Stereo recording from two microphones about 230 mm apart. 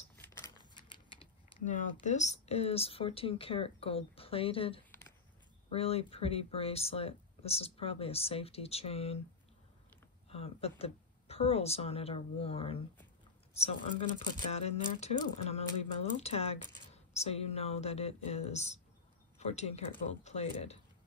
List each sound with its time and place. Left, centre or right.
0.1 s scissors: centre
0.7 s speech: left
10.3 s speech: left
14.5 s speech: left